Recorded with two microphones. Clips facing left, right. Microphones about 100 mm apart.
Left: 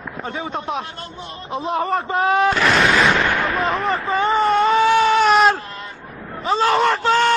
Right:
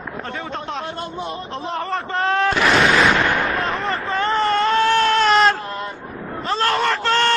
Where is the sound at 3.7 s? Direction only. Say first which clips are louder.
Left 3 dB; centre (ahead or behind).